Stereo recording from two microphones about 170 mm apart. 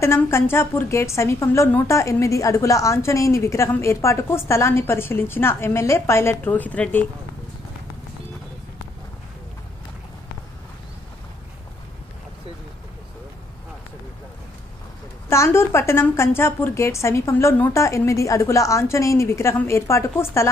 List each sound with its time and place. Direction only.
0.0 s a woman's voice: 15° left (ahead or behind)
15.2 s a woman's voice: 15° left (ahead or behind)